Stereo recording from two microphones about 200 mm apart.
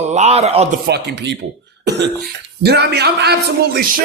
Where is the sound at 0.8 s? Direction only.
55° right (ahead or behind).